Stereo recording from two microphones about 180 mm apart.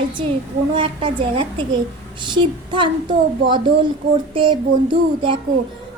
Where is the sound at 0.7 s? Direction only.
30° right (ahead or behind).